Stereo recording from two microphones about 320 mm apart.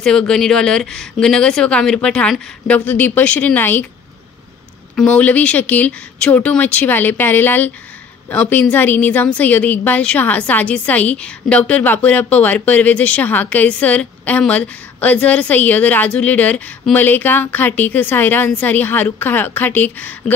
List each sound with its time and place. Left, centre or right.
0.0 s a woman's voice: centre
4.9 s a woman's voice: centre